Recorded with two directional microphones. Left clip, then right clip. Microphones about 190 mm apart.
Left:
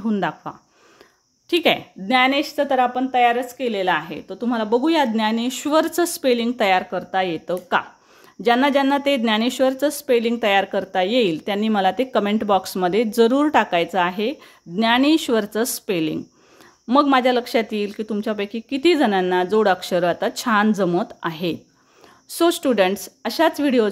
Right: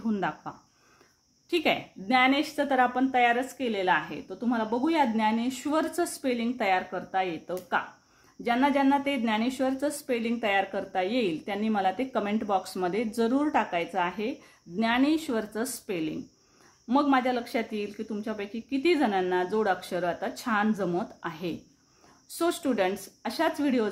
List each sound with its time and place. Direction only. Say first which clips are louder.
0.0 s a woman's voice: left 7 dB; 35° left (ahead or behind)